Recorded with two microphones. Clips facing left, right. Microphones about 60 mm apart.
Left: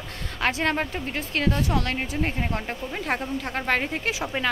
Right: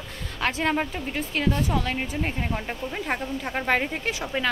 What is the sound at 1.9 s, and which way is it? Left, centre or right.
A woman's voice, centre.